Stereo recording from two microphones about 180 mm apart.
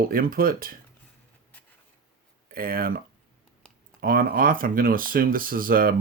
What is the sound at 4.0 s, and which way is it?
Speech, 55° right (ahead or behind).